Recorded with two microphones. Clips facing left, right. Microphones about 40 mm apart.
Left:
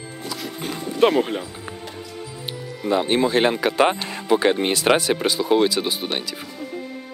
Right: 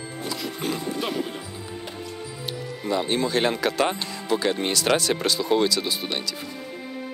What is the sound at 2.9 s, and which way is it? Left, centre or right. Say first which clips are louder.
Speech: left 5 dB; left.